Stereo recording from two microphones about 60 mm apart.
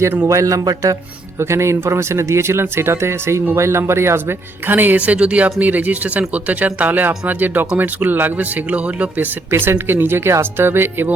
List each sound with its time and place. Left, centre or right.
0.3 s speech: right
1.4 s speech: right
4.9 s speech: right
9.5 s speech: right